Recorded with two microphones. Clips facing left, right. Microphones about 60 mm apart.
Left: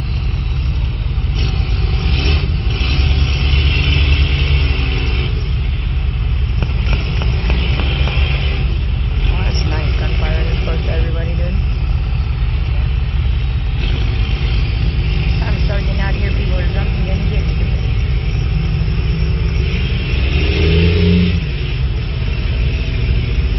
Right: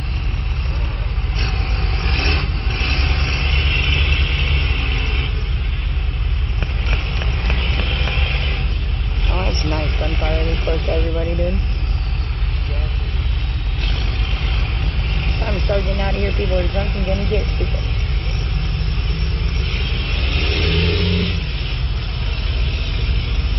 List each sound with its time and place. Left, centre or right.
2.0 s vehicle: right
3.4 s vehicle: right
3.7 s vehicle: centre
7.4 s vehicle: centre
10.2 s vehicle: centre
15.1 s vehicle: centre
19.7 s vehicle: centre